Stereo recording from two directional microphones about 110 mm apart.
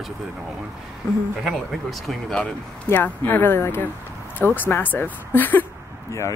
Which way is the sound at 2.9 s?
15° left (ahead or behind).